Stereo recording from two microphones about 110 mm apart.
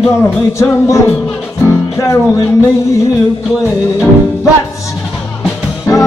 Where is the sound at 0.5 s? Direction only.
25° left (ahead or behind).